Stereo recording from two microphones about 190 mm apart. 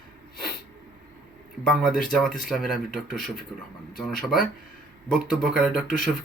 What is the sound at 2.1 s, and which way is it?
Speech, centre (ahead or behind).